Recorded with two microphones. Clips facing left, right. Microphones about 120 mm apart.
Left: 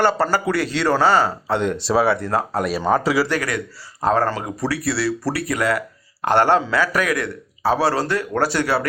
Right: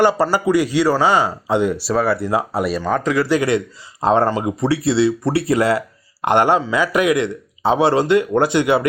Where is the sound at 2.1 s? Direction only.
10° right (ahead or behind).